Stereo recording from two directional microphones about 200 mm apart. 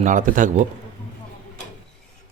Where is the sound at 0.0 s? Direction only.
40° right (ahead or behind).